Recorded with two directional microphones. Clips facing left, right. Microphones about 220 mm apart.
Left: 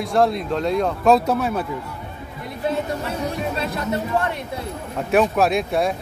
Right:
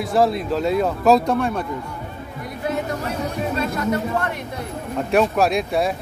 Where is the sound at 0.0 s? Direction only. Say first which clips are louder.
Even; centre (ahead or behind).